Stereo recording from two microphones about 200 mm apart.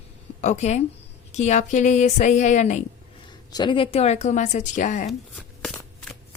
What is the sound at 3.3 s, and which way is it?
Speech, 20° left (ahead or behind).